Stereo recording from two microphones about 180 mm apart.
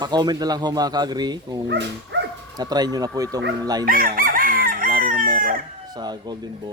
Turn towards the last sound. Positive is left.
turn(degrees=-25)  # may be behind; listen again after turning